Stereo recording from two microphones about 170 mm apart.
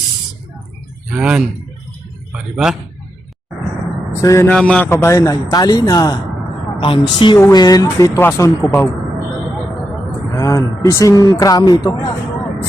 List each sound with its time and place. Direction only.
1.1 s a man's voice: 5° right (ahead or behind)
4.1 s speech: 15° left (ahead or behind)
4.4 s a man's voice: 5° left (ahead or behind); by 7.3 s 30° left (ahead or behind)
7.3 s speech: 20° left (ahead or behind)
10.3 s a man's voice: 15° left (ahead or behind)